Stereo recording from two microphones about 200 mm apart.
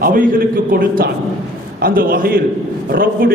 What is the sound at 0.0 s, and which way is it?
A man's voice, 45° right (ahead or behind).